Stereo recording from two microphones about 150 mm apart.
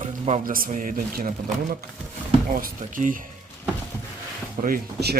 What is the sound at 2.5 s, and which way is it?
Speech, 70° right (ahead or behind).